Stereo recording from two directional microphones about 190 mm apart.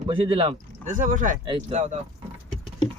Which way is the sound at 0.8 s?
45° right (ahead or behind).